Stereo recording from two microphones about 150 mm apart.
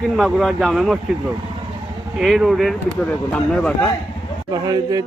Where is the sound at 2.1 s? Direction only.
Centre (ahead or behind).